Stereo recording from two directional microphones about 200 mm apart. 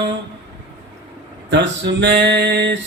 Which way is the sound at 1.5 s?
60° right (ahead or behind).